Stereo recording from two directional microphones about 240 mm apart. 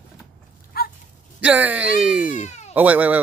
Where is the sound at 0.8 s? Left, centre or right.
Left.